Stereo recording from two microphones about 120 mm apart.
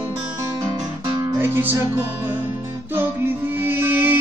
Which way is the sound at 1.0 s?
20° right (ahead or behind).